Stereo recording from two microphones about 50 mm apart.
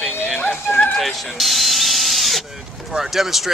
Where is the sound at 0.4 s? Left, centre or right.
Left.